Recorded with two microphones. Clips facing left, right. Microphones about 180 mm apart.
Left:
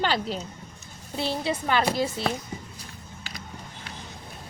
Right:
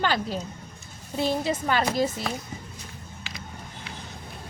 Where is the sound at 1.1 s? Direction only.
45° right (ahead or behind).